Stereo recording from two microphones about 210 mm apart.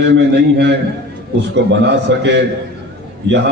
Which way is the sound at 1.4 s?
55° right (ahead or behind).